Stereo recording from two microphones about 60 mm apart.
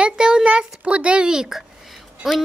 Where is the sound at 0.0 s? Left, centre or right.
Centre.